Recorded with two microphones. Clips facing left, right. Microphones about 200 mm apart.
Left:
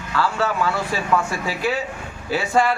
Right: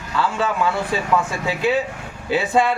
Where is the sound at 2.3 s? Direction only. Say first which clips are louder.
Right 1 dB; 20° right (ahead or behind).